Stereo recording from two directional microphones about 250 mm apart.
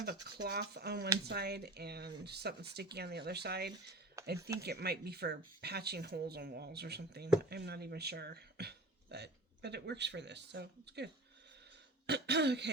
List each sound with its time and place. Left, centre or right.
0.0 s speech: right
4.2 s a sound: centre
4.6 s speech: right
12.0 s throat clearing: right